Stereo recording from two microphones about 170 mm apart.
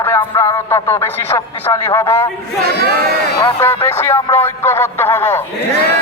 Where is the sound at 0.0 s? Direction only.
15° left (ahead or behind).